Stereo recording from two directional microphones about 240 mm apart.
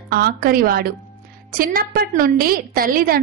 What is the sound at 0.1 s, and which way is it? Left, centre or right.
A woman's voice, right.